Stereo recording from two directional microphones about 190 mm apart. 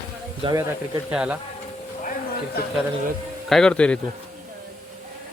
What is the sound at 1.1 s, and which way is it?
Speech, 5° right (ahead or behind).